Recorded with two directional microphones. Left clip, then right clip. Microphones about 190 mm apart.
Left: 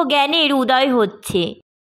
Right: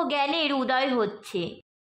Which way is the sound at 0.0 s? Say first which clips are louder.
Left 9 dB; 35° left (ahead or behind).